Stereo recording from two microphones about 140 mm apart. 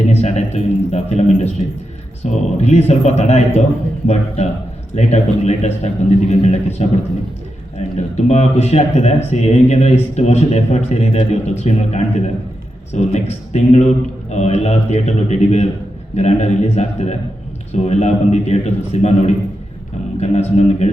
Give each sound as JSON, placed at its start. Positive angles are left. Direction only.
{"t": 0.1, "sound": "a man's voice", "side_deg": 55}